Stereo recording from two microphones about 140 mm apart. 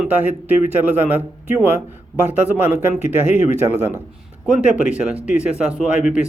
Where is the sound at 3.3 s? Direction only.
15° right (ahead or behind).